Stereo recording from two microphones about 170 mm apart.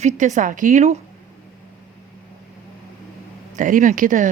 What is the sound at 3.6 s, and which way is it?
Speech, 50° right (ahead or behind).